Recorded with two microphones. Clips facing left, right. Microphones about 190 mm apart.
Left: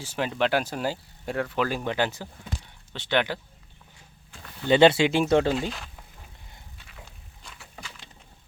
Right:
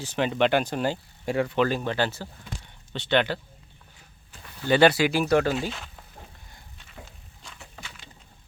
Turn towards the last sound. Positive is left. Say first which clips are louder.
# even
turn(degrees=0)  # may be behind; listen again after turning